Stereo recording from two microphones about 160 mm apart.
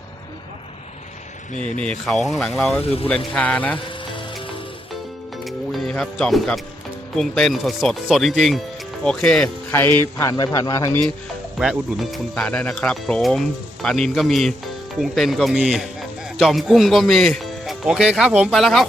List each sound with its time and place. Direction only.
1.8 s speech: 5° left (ahead or behind)
2.8 s speech: 35° left (ahead or behind)
3.3 s speech: 10° left (ahead or behind)
3.8 s music: 30° left (ahead or behind)
5.5 s music: 5° left (ahead or behind)
7.2 s speech: 5° left (ahead or behind)
9.7 s a man's voice: 15° left (ahead or behind)
11.6 s a man's voice: centre (ahead or behind)